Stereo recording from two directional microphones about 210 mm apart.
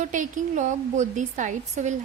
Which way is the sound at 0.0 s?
35° right (ahead or behind).